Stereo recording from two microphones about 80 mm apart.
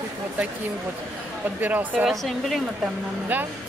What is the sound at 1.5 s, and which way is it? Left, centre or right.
Speech, right.